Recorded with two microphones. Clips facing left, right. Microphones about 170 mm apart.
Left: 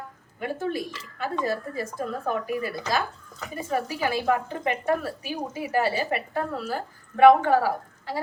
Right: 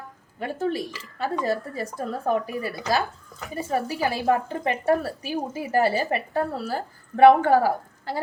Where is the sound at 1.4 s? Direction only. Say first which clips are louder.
Right 2 dB; 40° right (ahead or behind).